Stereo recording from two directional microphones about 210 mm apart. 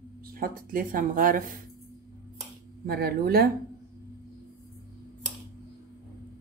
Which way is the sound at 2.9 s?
45° right (ahead or behind).